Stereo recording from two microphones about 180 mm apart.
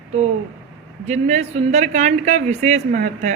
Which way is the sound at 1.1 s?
40° right (ahead or behind).